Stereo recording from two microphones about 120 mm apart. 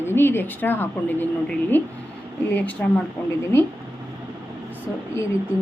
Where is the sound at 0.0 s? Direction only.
20° left (ahead or behind).